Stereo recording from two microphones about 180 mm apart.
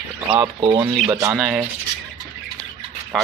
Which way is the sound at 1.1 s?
15° right (ahead or behind).